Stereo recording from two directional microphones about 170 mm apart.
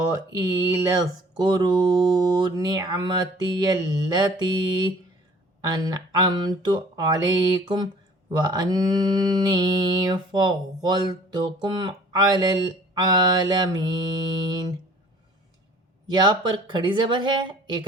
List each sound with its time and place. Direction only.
0.3 s mantra: 20° right (ahead or behind)
16.0 s mantra: 25° right (ahead or behind)